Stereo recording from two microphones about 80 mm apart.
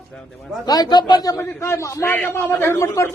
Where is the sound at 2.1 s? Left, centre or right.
Centre; by 3.1 s left.